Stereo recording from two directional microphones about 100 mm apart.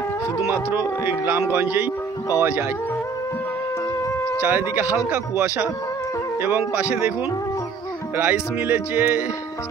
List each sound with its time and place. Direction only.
0.5 s speech: 20° right (ahead or behind)
4.4 s speech: 20° right (ahead or behind)
8.2 s speech: 15° right (ahead or behind)